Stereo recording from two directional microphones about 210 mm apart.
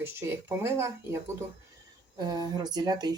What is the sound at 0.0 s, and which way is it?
Speech, 10° right (ahead or behind).